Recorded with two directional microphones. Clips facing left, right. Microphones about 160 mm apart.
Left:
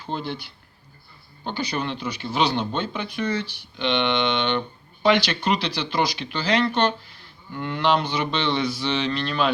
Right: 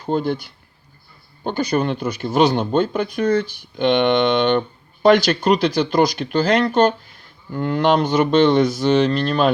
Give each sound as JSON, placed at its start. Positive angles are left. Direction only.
{"t": 0.0, "sound": "speech", "side_deg": -45}